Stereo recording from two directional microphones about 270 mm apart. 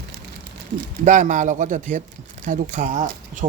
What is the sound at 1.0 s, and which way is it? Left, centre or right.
Speech, right.